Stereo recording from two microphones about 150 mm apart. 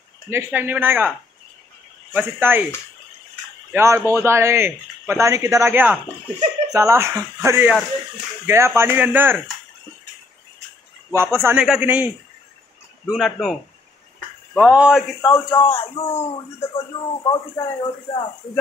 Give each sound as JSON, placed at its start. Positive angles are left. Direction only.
{"t": 0.3, "sound": "speech", "side_deg": -15}
{"t": 2.1, "sound": "speech", "side_deg": -15}
{"t": 3.7, "sound": "speech", "side_deg": -20}
{"t": 11.1, "sound": "speech", "side_deg": -15}
{"t": 13.1, "sound": "speech", "side_deg": 0}
{"t": 15.2, "sound": "speech", "side_deg": 25}
{"t": 15.8, "sound": "speech", "side_deg": 45}
{"t": 16.3, "sound": "speech", "side_deg": 25}